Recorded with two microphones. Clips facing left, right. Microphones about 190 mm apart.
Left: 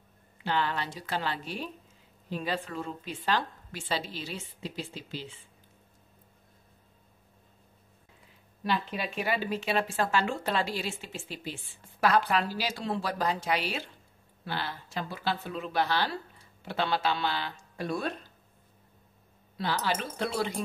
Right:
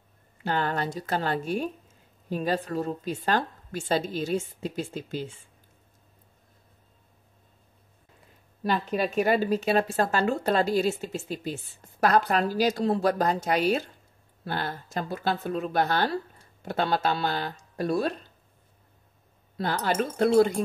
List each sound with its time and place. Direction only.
0.4 s speech: 45° right (ahead or behind)
8.6 s speech: 45° right (ahead or behind)
19.5 s speech: 50° right (ahead or behind)